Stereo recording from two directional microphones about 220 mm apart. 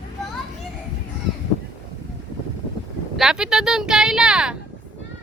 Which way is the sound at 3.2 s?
Centre (ahead or behind).